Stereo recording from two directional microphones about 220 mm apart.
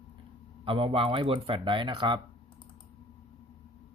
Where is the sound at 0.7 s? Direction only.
25° right (ahead or behind).